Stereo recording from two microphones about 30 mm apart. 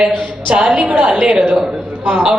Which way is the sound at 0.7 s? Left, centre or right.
Right.